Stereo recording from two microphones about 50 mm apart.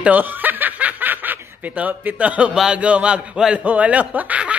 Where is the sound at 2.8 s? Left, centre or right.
Right.